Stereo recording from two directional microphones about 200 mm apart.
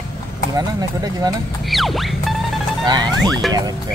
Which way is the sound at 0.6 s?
20° right (ahead or behind).